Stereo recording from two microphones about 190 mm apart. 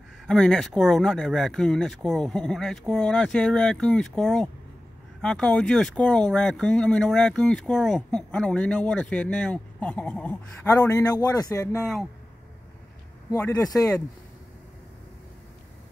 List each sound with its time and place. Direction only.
0.3 s speech: 5° left (ahead or behind)
13.6 s speech: 20° left (ahead or behind)